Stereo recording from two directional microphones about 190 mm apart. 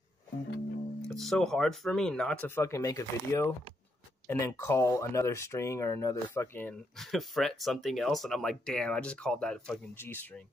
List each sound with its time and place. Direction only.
1.0 s speech: centre (ahead or behind)